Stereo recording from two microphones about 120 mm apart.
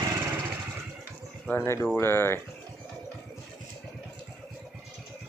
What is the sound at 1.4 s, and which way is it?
Speech, 15° left (ahead or behind).